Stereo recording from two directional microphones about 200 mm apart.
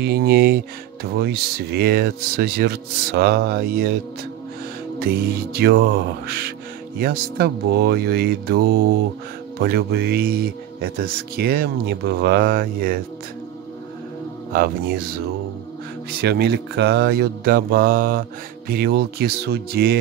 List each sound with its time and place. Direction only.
0.0 s speech: 50° right (ahead or behind)
4.9 s speech: 50° right (ahead or behind)
14.5 s speech: 50° right (ahead or behind)